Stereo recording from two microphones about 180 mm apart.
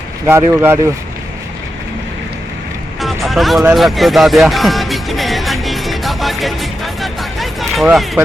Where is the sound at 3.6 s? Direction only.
Centre (ahead or behind).